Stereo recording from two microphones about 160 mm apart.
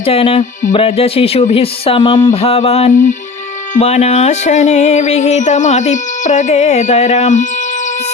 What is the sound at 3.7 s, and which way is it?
Music, 45° left (ahead or behind).